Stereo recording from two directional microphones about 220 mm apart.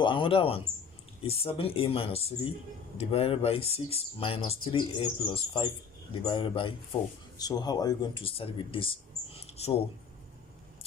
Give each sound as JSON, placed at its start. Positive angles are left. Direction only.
{"t": 0.0, "sound": "speech", "side_deg": 20}